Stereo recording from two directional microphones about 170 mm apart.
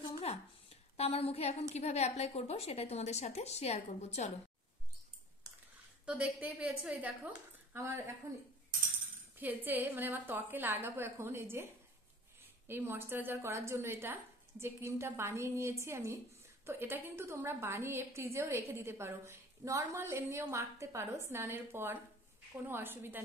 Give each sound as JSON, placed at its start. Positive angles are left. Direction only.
{"t": 0.2, "sound": "a woman's voice", "side_deg": 40}
{"t": 6.0, "sound": "a woman's voice", "side_deg": -10}
{"t": 9.4, "sound": "a woman's voice", "side_deg": -10}
{"t": 12.6, "sound": "a woman's voice", "side_deg": -15}